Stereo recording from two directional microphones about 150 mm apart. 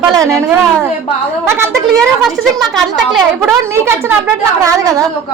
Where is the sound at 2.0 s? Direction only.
Centre (ahead or behind).